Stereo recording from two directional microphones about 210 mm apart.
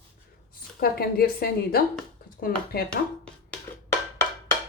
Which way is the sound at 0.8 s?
45° left (ahead or behind).